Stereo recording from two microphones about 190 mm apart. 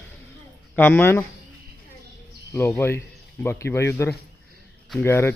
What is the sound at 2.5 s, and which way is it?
Speech, 10° left (ahead or behind).